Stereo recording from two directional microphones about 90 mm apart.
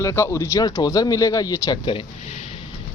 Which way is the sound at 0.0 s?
30° left (ahead or behind).